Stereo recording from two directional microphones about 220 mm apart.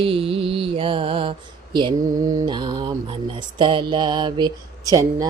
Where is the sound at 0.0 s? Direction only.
25° right (ahead or behind).